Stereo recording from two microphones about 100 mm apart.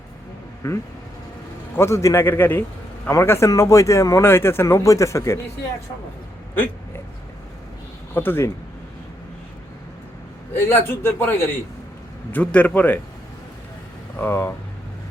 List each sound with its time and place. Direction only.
0.6 s a man's voice: 25° left (ahead or behind)
6.5 s a sound: 20° left (ahead or behind)
8.1 s speech: 20° left (ahead or behind)
10.5 s a man's voice: 25° left (ahead or behind)
14.2 s speech: 25° left (ahead or behind)